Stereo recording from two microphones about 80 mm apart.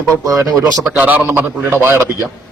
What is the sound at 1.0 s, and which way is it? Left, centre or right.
A man's voice, right.